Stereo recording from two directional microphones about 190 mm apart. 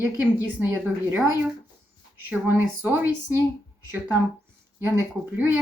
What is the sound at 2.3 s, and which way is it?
Speech, 10° right (ahead or behind).